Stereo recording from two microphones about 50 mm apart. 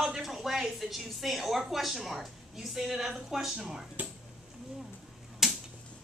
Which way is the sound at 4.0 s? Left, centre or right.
Right.